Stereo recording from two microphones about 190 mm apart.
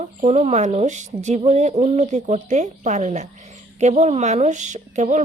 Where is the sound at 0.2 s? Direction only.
35° right (ahead or behind).